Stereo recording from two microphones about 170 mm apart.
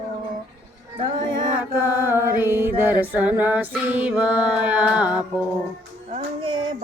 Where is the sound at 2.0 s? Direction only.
15° right (ahead or behind).